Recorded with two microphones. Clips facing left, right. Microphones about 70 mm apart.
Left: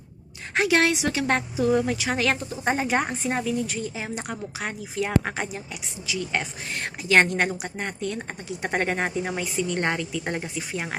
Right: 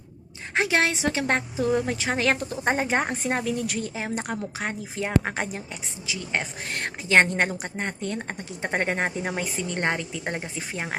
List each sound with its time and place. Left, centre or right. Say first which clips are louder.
0.5 s a woman's voice: left 2 dB; right
4.6 s a woman's voice: left 4 dB; right
5.4 s a woman's voice: right 1 dB; right
6.1 s a woman's voice: left 1 dB; right
6.7 s a woman's voice: right 1 dB; right
7.1 s a woman's voice: even; right
8.7 s a woman's voice: even; right
9.8 s a woman's voice: even; right